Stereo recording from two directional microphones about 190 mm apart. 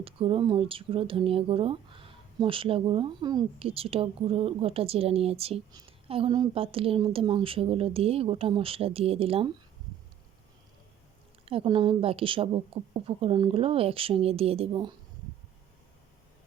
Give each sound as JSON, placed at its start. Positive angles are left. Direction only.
{"t": 0.0, "sound": "speech", "side_deg": -30}
{"t": 11.4, "sound": "speech", "side_deg": -30}